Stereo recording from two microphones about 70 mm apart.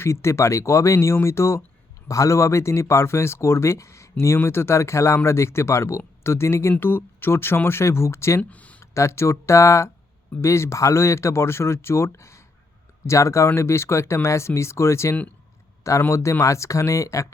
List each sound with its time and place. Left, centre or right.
0.0 s speech: left
8.4 s speech: centre
8.8 s speech: left